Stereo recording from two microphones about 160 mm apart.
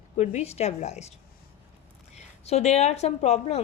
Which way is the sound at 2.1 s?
40° left (ahead or behind).